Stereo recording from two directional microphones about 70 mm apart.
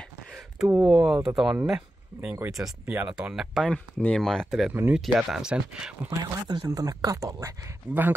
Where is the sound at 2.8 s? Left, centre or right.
Right.